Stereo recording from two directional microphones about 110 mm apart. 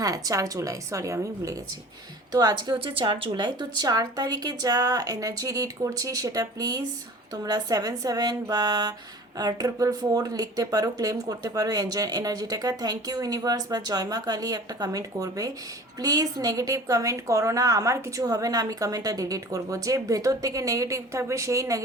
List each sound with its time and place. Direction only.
0.0 s speech: 30° right (ahead or behind)
2.7 s speech: 55° right (ahead or behind); by 21.8 s 30° right (ahead or behind)